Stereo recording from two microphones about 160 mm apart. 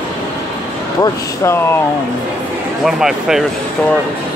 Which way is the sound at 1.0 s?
15° left (ahead or behind).